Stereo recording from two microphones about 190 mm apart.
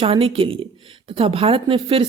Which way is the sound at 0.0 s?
30° right (ahead or behind).